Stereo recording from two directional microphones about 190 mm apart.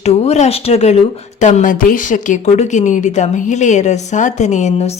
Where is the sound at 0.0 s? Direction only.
35° left (ahead or behind).